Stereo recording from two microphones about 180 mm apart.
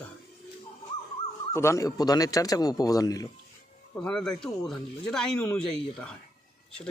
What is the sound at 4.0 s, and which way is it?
Speech, 5° left (ahead or behind).